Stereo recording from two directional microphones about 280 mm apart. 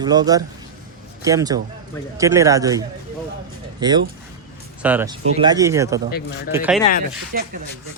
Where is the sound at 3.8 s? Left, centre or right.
Centre.